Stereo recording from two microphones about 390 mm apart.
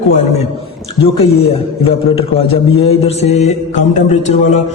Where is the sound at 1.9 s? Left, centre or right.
Centre.